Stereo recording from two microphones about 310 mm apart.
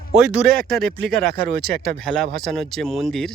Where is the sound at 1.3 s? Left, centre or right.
Right.